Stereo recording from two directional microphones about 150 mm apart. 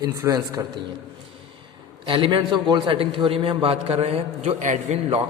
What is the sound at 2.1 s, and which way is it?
A man's voice, 35° right (ahead or behind).